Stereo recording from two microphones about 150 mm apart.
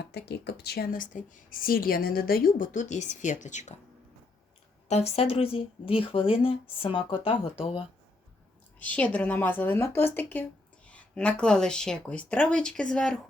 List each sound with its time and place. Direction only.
0.0 s speech: 90° left
2.7 s a woman's voice: 55° left (ahead or behind)
4.9 s speech: 45° left (ahead or behind)
8.8 s speech: 10° left (ahead or behind)